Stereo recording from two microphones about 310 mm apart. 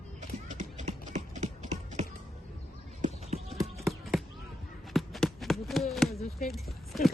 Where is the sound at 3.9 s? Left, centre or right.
Centre.